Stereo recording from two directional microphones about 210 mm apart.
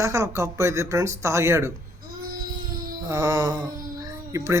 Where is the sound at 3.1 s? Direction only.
15° right (ahead or behind).